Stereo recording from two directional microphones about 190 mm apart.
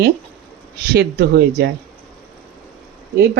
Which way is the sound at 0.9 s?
55° right (ahead or behind).